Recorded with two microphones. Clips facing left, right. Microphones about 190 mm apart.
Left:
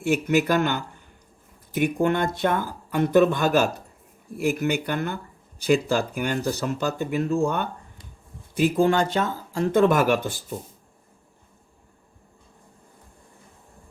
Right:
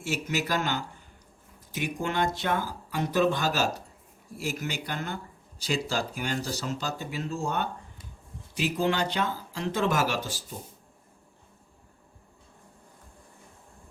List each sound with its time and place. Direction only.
0.0 s speech: 55° left (ahead or behind)